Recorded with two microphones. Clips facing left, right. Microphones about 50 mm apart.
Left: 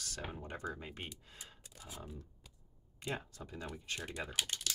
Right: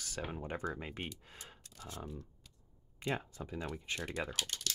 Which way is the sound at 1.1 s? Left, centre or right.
Centre.